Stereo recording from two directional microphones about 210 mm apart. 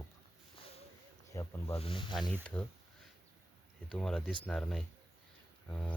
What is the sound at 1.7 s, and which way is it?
Speech, 25° left (ahead or behind).